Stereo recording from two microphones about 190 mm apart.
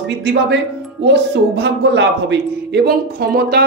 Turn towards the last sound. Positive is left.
turn(degrees=-55)  # may be behind; listen again after turning